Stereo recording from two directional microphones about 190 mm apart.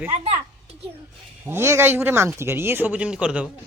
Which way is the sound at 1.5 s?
15° right (ahead or behind).